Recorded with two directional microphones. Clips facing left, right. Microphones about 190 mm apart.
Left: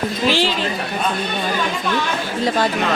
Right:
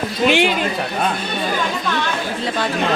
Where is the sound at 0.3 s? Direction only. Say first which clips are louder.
Right 3 dB; 60° right (ahead or behind).